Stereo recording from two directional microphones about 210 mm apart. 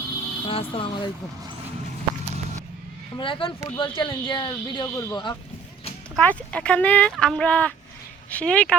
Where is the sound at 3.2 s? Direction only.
25° left (ahead or behind).